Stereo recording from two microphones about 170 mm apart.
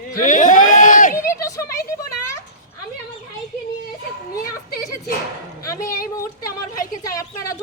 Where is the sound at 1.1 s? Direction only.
15° left (ahead or behind).